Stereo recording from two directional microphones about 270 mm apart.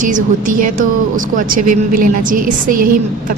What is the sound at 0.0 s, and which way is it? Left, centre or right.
A woman's voice, right.